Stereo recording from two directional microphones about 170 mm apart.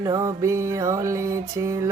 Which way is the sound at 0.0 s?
20° right (ahead or behind).